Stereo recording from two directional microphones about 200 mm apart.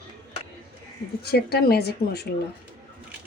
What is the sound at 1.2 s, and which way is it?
Speech, 50° left (ahead or behind).